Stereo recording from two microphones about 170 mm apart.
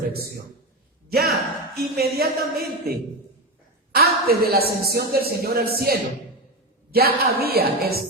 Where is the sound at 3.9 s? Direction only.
65° right (ahead or behind).